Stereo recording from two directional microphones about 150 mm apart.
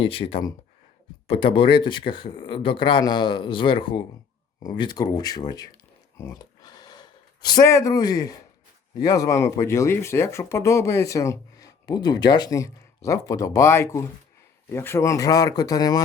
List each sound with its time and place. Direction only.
0.0 s speech: 40° left (ahead or behind)
6.1 s a sound: 25° left (ahead or behind)
7.4 s speech: 25° left (ahead or behind)